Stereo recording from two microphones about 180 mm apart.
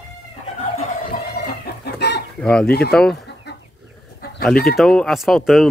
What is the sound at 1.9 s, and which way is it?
Chicken, 65° left (ahead or behind).